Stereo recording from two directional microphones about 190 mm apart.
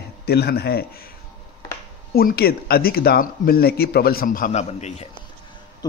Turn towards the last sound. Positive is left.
turn(degrees=35)  # may be behind; listen again after turning